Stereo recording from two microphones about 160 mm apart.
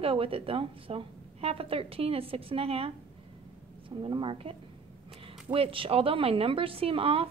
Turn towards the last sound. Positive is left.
turn(degrees=-35)  # may be behind; listen again after turning